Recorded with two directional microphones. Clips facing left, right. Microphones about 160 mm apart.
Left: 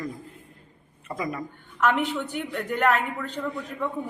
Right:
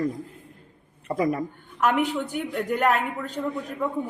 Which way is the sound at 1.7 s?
10° right (ahead or behind).